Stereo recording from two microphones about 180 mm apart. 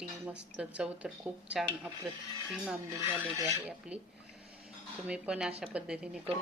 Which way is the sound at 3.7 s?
5° right (ahead or behind).